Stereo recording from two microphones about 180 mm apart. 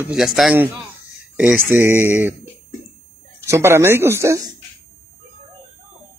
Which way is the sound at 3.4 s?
15° right (ahead or behind).